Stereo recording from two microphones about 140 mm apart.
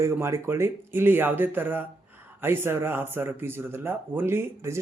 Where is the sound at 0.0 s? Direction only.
20° right (ahead or behind).